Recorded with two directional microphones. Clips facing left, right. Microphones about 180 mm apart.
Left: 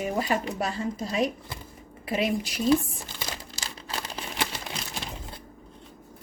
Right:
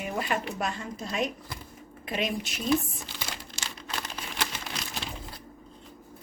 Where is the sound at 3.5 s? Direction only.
30° left (ahead or behind).